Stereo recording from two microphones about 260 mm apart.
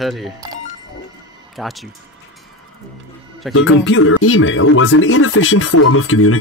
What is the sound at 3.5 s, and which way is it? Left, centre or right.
Speech, left.